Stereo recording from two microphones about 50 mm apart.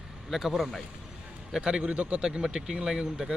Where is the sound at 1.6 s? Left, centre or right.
Right.